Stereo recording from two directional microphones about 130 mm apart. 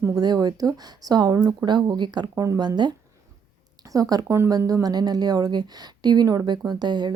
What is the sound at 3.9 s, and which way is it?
Speech, 25° right (ahead or behind).